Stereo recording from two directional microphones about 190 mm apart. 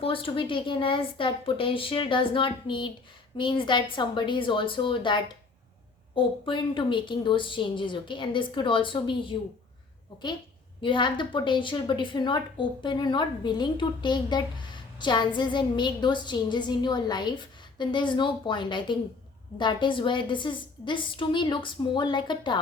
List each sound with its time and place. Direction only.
0.0 s a woman's voice: 30° left (ahead or behind)
10.8 s a woman's voice: 25° left (ahead or behind)